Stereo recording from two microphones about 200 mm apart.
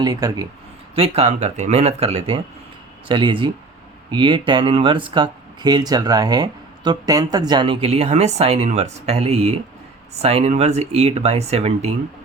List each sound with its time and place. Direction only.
0.0 s speech: 20° right (ahead or behind)
0.9 s speech: 30° right (ahead or behind)